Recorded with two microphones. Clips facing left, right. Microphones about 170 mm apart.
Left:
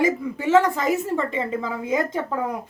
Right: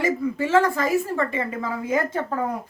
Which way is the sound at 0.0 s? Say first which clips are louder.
Left 1 dB; 15° left (ahead or behind).